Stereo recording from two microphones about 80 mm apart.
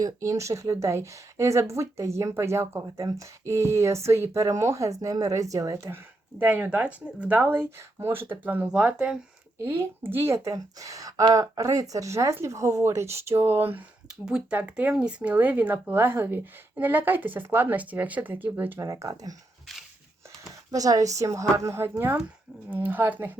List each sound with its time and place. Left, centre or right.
0.0 s speech: right
5.9 s speech: right
9.6 s speech: right
14.1 s speech: centre
18.8 s a woman's voice: right
20.7 s a woman's voice: right